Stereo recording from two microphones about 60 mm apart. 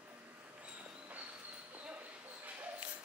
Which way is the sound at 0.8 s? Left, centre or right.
Right.